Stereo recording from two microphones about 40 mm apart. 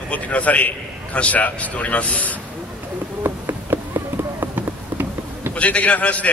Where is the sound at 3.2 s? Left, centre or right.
Right.